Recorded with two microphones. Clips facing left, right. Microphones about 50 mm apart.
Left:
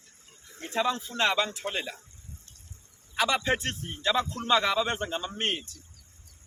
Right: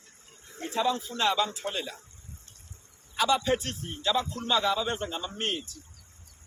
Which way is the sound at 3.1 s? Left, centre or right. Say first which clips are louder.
Right 1 dB; left.